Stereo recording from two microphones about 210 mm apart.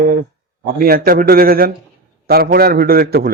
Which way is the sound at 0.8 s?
45° right (ahead or behind).